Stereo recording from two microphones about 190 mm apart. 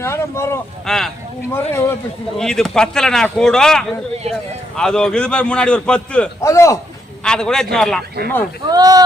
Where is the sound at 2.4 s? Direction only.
Centre (ahead or behind).